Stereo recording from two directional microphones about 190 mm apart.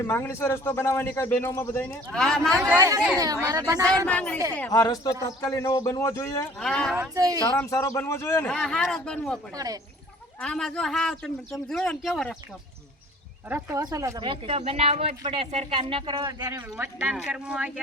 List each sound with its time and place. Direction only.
0.0 s a man's voice: 10° left (ahead or behind)
2.7 s speech: 20° right (ahead or behind)
3.8 s a man's voice: 5° left (ahead or behind)
4.7 s a man's voice: 20° left (ahead or behind)
6.6 s speech: 5° left (ahead or behind)
6.9 s speech: 15° right (ahead or behind)
7.4 s a man's voice: 15° left (ahead or behind)
8.4 s speech: 5° left (ahead or behind)
10.4 s speech: 5° left (ahead or behind)
13.5 s speech: 15° right (ahead or behind)
16.6 s speech: 10° right (ahead or behind)